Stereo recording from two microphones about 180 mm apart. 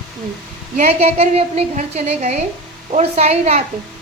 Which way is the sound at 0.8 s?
35° right (ahead or behind).